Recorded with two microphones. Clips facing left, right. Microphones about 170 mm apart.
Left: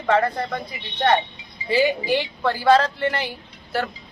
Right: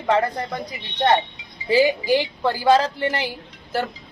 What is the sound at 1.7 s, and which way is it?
A woman's voice, 10° right (ahead or behind).